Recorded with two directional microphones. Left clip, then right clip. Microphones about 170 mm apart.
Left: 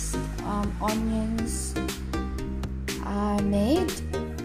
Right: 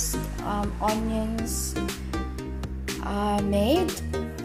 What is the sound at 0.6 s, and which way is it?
Music, centre (ahead or behind).